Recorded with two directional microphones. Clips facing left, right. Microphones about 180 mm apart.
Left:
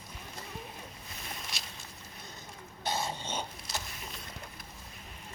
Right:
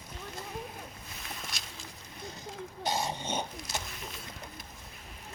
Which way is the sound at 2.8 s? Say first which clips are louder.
Right 2 dB; 15° right (ahead or behind).